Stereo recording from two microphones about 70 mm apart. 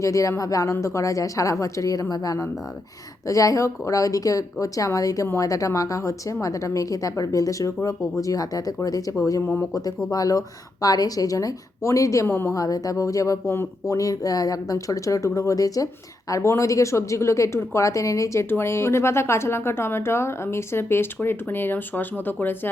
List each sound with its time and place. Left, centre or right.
0.0 s a woman's voice: left
12.2 s speech: left
12.5 s speech: left
16.3 s a woman's voice: left
18.4 s speech: left